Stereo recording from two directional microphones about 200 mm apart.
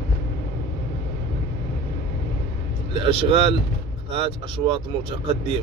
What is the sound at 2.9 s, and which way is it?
A man's voice, 25° right (ahead or behind).